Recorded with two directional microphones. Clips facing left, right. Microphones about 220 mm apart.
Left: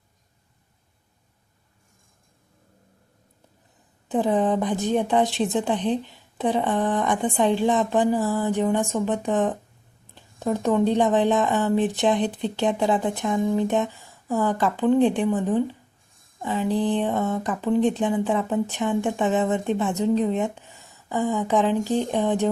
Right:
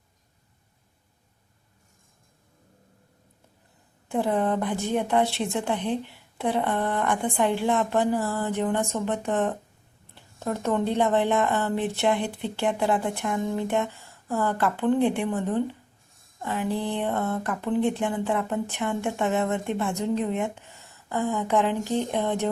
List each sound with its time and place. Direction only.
4.1 s speech: 15° left (ahead or behind)
5.8 s a woman's voice: 10° right (ahead or behind)
6.3 s speech: 15° left (ahead or behind)